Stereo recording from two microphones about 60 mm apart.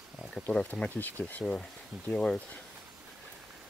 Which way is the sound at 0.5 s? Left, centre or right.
Centre.